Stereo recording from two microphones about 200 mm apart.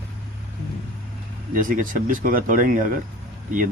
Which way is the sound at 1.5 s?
45° right (ahead or behind).